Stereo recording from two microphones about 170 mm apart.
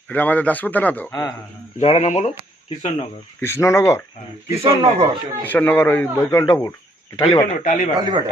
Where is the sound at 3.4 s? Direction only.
15° left (ahead or behind).